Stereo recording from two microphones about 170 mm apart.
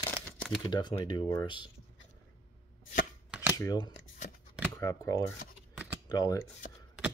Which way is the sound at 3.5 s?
20° left (ahead or behind).